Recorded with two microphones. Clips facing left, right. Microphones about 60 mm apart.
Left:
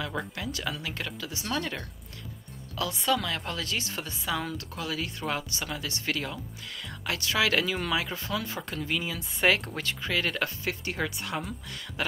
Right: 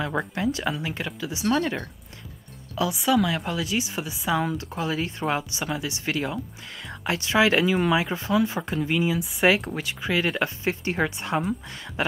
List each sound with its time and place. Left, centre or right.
0.0 s a woman's voice: right